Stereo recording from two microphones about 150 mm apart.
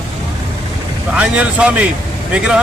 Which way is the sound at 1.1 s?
10° right (ahead or behind).